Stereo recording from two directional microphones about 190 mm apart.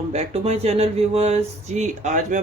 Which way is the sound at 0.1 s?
35° right (ahead or behind).